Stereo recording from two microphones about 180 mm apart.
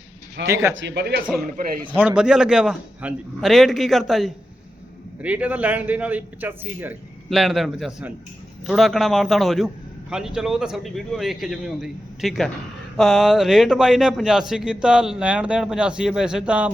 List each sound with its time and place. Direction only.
0.4 s a man's voice: 15° right (ahead or behind)
0.8 s speech: 75° right (ahead or behind)
2.0 s a man's voice: 5° right (ahead or behind)